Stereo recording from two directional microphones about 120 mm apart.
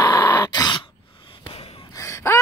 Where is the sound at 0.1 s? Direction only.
20° left (ahead or behind).